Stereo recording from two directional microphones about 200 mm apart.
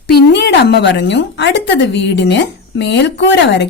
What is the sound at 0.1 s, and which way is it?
A woman's voice, 55° left (ahead or behind).